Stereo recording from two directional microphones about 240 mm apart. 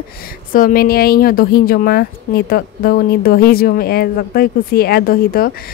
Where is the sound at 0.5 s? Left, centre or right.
Left.